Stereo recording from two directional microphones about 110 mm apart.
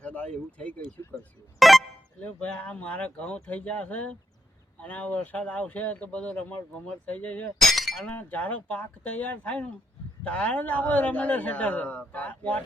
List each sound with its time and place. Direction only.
0.0 s a sound: 10° left (ahead or behind)
0.6 s speech: 10° left (ahead or behind)
1.5 s a sound: centre (ahead or behind)
2.2 s speech: 15° left (ahead or behind)
7.6 s speech: centre (ahead or behind)
8.1 s speech: 15° left (ahead or behind)